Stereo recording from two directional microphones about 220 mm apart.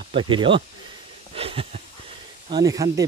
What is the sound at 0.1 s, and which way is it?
Speech, 20° right (ahead or behind).